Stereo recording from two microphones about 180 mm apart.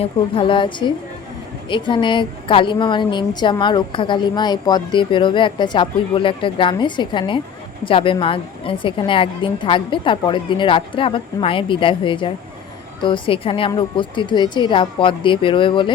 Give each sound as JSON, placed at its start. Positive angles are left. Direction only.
{"t": 0.0, "sound": "a woman's voice", "side_deg": 30}